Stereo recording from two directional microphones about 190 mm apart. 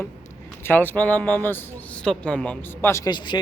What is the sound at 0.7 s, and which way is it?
Speech, 10° left (ahead or behind).